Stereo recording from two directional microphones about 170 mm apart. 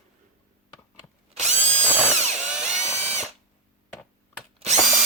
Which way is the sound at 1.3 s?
40° right (ahead or behind).